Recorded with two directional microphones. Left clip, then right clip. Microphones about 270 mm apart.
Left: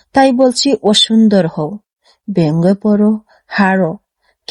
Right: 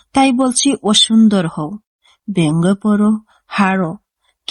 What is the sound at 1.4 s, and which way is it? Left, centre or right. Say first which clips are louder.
Speech: left 5 dB; centre.